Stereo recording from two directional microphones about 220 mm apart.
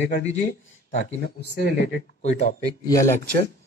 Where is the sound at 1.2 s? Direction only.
50° left (ahead or behind).